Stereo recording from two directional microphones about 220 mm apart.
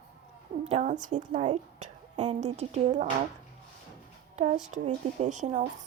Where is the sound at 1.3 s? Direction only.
20° right (ahead or behind).